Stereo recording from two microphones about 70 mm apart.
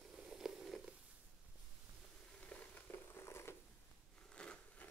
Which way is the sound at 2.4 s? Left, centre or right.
Left.